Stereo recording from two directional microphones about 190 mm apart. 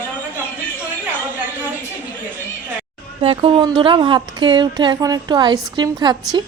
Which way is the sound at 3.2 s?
30° right (ahead or behind).